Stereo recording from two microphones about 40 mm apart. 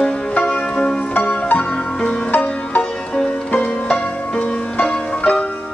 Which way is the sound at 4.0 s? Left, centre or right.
Left.